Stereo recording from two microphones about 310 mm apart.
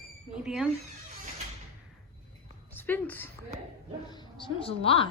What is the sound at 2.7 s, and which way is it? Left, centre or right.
A woman's voice, centre.